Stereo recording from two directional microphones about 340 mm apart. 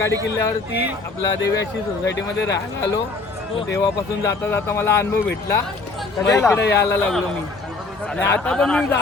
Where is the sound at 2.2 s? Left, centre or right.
Left.